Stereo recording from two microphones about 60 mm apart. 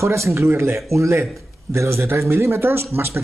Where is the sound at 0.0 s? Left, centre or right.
Right.